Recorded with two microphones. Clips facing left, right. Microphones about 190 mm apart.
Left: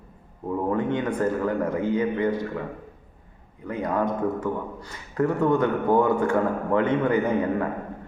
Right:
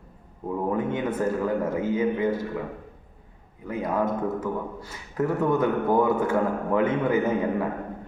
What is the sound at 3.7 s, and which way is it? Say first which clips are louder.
A man's voice: even; 5° right (ahead or behind).